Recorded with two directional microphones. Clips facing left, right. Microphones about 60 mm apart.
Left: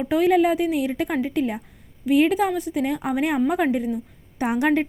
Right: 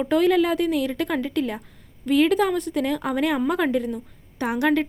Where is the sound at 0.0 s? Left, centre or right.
Centre.